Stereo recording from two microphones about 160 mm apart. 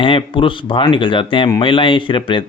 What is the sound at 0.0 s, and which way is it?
Speech, 35° left (ahead or behind).